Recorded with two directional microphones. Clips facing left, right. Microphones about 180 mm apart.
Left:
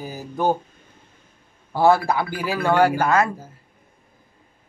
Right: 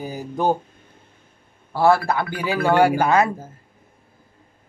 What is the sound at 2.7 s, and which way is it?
Speech, 10° right (ahead or behind).